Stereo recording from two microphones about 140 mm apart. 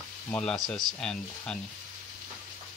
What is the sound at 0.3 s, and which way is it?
Speech, 5° left (ahead or behind).